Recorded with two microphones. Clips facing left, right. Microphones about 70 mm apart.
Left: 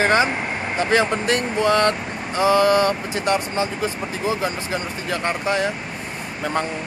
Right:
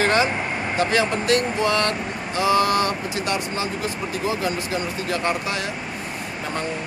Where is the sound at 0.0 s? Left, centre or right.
Left.